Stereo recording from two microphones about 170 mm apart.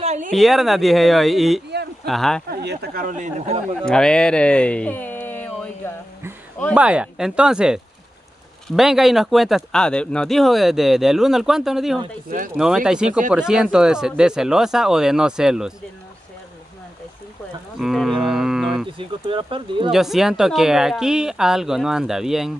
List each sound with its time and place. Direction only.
0.0 s a sound: 40° right (ahead or behind)
0.3 s speech: centre (ahead or behind)
2.5 s speech: 75° right (ahead or behind); by 3.6 s 40° right (ahead or behind)
3.8 s speech: 5° left (ahead or behind)
6.7 s speech: 5° right (ahead or behind)
17.7 s speech: centre (ahead or behind)
18.9 s speech: 30° right (ahead or behind)
19.9 s speech: centre (ahead or behind)